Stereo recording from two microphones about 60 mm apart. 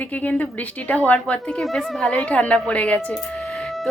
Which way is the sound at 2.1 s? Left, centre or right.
Left.